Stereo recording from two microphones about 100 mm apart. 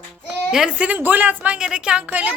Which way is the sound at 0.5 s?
10° right (ahead or behind).